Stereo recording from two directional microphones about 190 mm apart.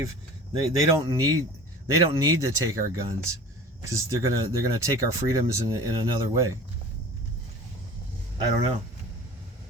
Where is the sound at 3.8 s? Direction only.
15° right (ahead or behind).